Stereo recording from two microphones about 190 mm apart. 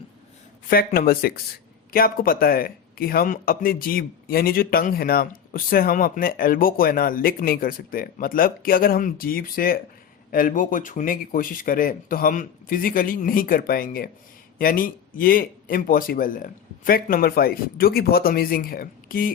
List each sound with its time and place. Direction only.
0.9 s a man's voice: 50° left (ahead or behind)